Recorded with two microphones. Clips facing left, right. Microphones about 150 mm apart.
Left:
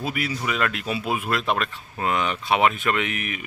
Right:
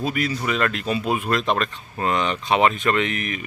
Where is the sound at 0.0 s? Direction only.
10° left (ahead or behind).